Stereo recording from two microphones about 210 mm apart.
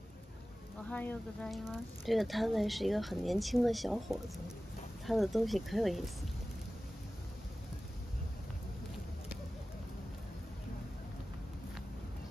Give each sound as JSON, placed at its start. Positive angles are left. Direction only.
{"t": 0.8, "sound": "speech", "side_deg": 5}